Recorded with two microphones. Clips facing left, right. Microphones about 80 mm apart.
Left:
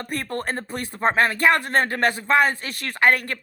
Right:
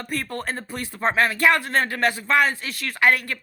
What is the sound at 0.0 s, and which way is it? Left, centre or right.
Speech, left.